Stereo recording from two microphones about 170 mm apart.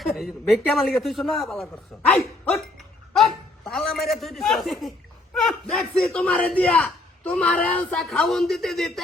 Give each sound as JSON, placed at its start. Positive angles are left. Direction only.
{"t": 0.2, "sound": "a man's voice", "side_deg": 0}
{"t": 2.0, "sound": "dog", "side_deg": 5}
{"t": 3.1, "sound": "a man's voice", "side_deg": 0}